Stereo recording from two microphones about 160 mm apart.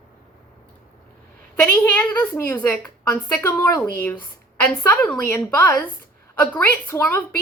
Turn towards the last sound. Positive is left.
turn(degrees=10)  # may be behind; listen again after turning